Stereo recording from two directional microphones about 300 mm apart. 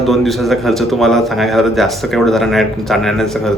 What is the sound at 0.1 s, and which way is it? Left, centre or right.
A man's voice, centre.